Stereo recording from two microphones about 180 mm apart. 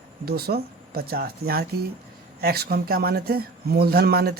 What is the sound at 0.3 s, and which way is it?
Speech, 60° right (ahead or behind).